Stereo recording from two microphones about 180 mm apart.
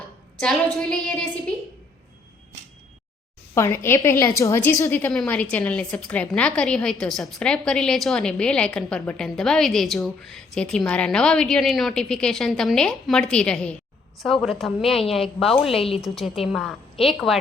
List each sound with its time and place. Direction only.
0.8 s a woman's voice: 5° left (ahead or behind)
3.5 s a woman's voice: 15° left (ahead or behind)
15.7 s a woman's voice: 30° left (ahead or behind)
16.1 s a woman's voice: centre (ahead or behind)